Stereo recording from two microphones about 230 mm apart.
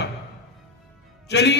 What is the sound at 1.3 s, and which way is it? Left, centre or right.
Speech, left.